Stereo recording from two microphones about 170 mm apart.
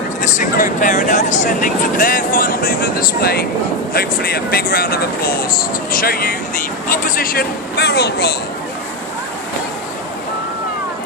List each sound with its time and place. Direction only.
0.2 s speech: 50° left (ahead or behind); by 8.4 s 70° left (ahead or behind)